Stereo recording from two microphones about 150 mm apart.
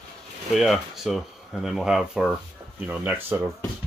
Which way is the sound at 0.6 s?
Centre (ahead or behind).